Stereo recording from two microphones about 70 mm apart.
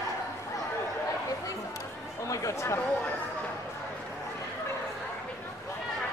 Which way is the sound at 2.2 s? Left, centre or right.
Left.